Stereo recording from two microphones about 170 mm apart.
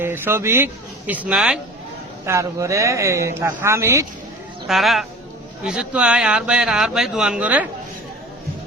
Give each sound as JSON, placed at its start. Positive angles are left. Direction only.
{"t": 0.0, "sound": "speech", "side_deg": -15}
{"t": 2.2, "sound": "speech", "side_deg": -15}
{"t": 4.6, "sound": "speech", "side_deg": 0}